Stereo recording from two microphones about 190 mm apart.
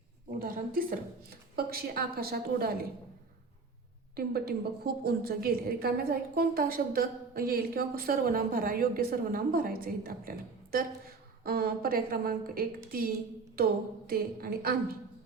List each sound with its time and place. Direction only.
0.3 s a woman's voice: 50° right (ahead or behind)
4.1 s a woman's voice: 55° right (ahead or behind)
14.1 s a woman's voice: 50° right (ahead or behind)